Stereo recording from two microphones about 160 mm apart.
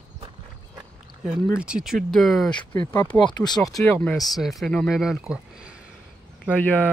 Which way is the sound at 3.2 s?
25° left (ahead or behind).